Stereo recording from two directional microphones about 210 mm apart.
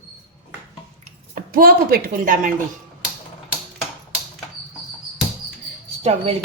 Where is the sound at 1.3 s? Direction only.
45° right (ahead or behind).